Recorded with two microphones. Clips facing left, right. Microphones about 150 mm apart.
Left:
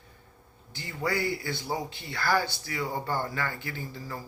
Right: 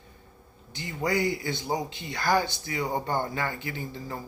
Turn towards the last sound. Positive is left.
turn(degrees=-20)  # may be behind; listen again after turning